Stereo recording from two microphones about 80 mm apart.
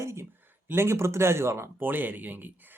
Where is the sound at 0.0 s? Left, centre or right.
Right.